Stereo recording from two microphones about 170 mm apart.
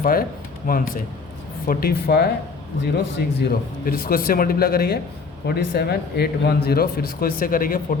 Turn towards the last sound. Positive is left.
turn(degrees=55)  # may be behind; listen again after turning